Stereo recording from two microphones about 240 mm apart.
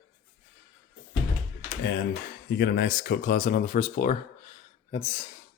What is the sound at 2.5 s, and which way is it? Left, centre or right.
Speech, left.